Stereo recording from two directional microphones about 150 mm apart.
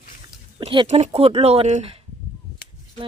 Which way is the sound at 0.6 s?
35° right (ahead or behind).